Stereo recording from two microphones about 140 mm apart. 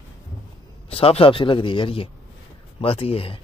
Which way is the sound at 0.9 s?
45° left (ahead or behind).